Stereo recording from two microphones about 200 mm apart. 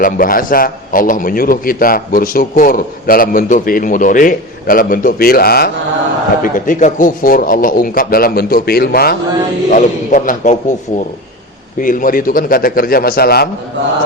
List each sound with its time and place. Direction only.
0.0 s a man's voice: 45° left (ahead or behind)
6.4 s a man's voice: 40° left (ahead or behind)